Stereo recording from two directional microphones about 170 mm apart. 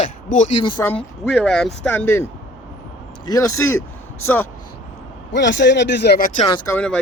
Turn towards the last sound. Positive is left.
turn(degrees=5)  # may be behind; listen again after turning